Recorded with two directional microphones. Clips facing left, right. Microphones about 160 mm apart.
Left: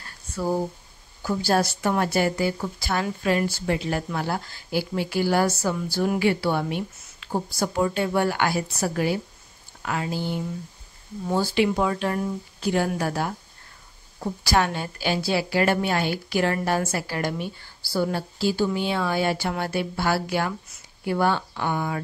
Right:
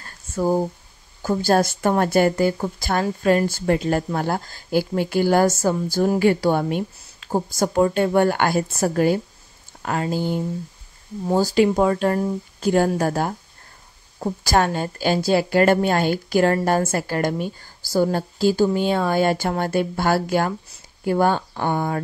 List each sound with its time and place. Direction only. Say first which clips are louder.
0.3 s a woman's voice: right 5 dB; 45° right (ahead or behind)